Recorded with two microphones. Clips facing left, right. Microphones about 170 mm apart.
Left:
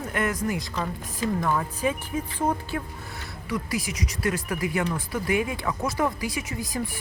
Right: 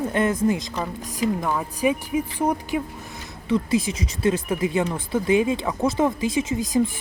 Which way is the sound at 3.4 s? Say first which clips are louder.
Right 8 dB; 25° right (ahead or behind).